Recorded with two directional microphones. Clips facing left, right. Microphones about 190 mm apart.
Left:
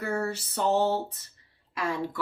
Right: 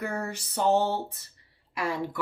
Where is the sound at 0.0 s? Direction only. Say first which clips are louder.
Left 3 dB; 15° right (ahead or behind).